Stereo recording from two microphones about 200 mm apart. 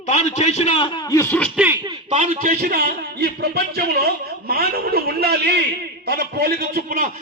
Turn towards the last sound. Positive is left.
turn(degrees=-50)  # may be behind; listen again after turning